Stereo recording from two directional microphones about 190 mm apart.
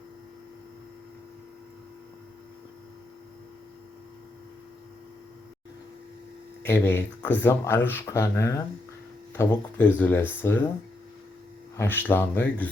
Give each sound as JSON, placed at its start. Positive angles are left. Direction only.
{"t": 6.6, "sound": "speech", "side_deg": 10}
{"t": 11.8, "sound": "speech", "side_deg": 10}